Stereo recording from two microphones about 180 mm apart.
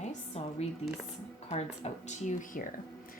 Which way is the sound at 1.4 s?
35° left (ahead or behind).